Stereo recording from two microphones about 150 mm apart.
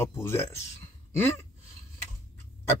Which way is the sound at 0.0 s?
20° left (ahead or behind).